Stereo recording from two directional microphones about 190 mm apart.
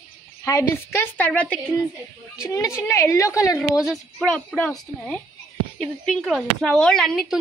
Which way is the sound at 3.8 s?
Centre (ahead or behind).